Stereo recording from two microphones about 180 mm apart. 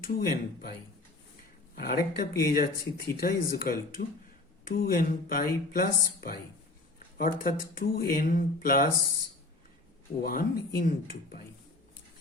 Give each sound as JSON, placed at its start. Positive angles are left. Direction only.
{"t": 0.0, "sound": "speech", "side_deg": 60}
{"t": 1.7, "sound": "speech", "side_deg": 55}
{"t": 10.2, "sound": "speech", "side_deg": 55}